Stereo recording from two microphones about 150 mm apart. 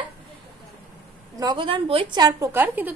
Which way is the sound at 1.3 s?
30° right (ahead or behind).